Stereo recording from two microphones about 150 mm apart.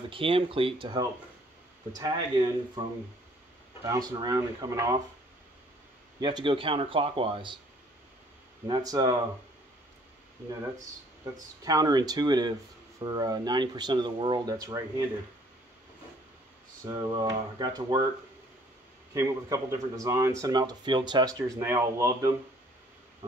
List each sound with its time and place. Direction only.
0.1 s speech: 35° right (ahead or behind)
6.2 s speech: 35° right (ahead or behind)
8.6 s speech: 30° right (ahead or behind)
11.3 s speech: 25° right (ahead or behind)
16.9 s speech: 30° right (ahead or behind)
19.1 s speech: 20° right (ahead or behind)